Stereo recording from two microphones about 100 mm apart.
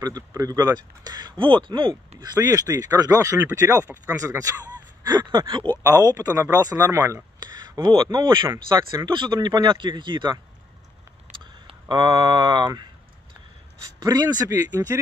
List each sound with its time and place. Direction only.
0.0 s speech: 40° right (ahead or behind)
2.3 s speech: 40° right (ahead or behind)
5.0 s a sound: 45° right (ahead or behind)
5.5 s speech: 50° right (ahead or behind); by 7.2 s 25° right (ahead or behind)
7.5 s a sound: 40° right (ahead or behind)
8.0 s speech: 45° right (ahead or behind)
8.7 s speech: 35° right (ahead or behind)
9.1 s speech: 55° right (ahead or behind)
11.9 s speech: 45° right (ahead or behind)
14.0 s speech: 35° right (ahead or behind)